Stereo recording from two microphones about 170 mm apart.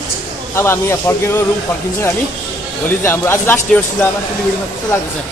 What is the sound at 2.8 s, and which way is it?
Speech, 15° left (ahead or behind).